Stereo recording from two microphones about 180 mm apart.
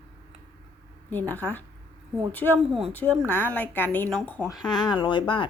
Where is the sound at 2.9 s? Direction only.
10° left (ahead or behind).